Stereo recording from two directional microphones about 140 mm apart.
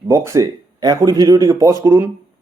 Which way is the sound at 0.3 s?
20° right (ahead or behind).